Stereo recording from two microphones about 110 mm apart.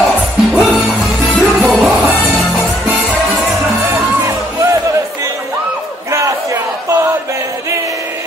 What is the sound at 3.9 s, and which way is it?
Music, 25° right (ahead or behind).